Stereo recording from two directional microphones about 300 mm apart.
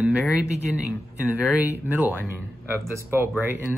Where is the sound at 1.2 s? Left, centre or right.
Centre.